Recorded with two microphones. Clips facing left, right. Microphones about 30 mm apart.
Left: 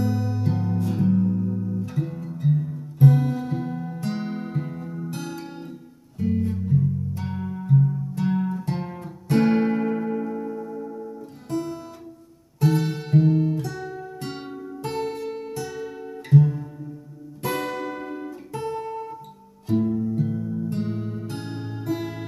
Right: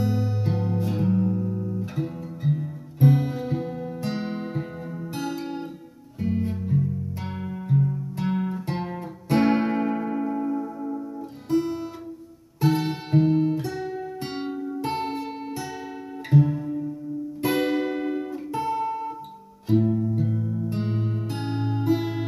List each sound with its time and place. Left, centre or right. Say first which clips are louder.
0.0 s music: left 1 dB; centre
14.9 s guitar: left 3 dB; centre
17.4 s music: right 4 dB; centre
20.7 s music: even; right